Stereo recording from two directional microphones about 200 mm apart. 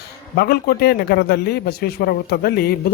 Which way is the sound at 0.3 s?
50° left (ahead or behind).